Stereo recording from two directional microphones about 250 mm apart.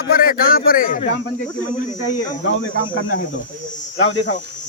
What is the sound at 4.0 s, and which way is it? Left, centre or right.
Cricket, left.